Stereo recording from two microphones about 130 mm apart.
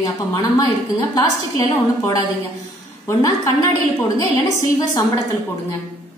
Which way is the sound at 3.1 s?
25° left (ahead or behind).